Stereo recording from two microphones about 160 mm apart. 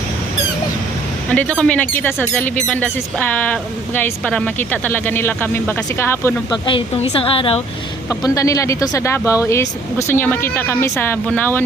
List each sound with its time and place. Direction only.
1.3 s speech: 5° left (ahead or behind)
6.5 s speech: 30° left (ahead or behind)
8.2 s speech: 20° left (ahead or behind)